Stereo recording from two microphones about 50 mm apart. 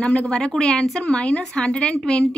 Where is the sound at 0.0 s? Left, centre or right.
Left.